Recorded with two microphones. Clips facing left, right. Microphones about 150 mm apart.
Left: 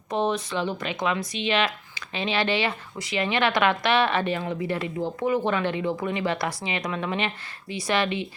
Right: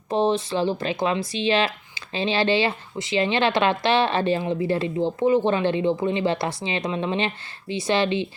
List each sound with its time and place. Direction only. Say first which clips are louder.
0.1 s speech: right 4 dB; 30° right (ahead or behind)